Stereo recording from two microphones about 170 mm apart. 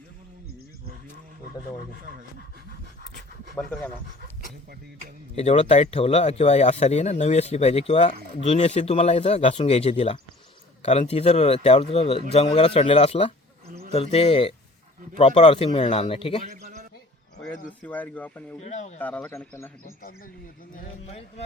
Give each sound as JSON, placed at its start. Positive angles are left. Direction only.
{"t": 5.3, "sound": "speech", "side_deg": 35}
{"t": 17.7, "sound": "speech", "side_deg": 10}
{"t": 18.6, "sound": "speech", "side_deg": 40}
{"t": 18.9, "sound": "speech", "side_deg": 10}
{"t": 20.0, "sound": "speech", "side_deg": 55}
{"t": 21.1, "sound": "speech", "side_deg": 40}